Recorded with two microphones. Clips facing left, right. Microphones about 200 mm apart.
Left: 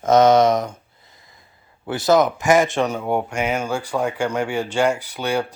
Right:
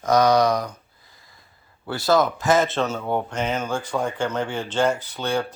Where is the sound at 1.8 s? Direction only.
20° left (ahead or behind).